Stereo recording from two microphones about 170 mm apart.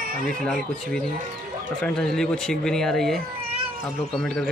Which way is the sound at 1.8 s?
5° left (ahead or behind).